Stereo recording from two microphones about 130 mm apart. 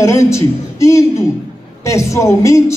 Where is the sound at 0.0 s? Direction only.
20° left (ahead or behind).